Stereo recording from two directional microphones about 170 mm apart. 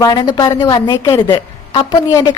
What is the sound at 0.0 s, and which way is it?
A woman's voice, 25° left (ahead or behind).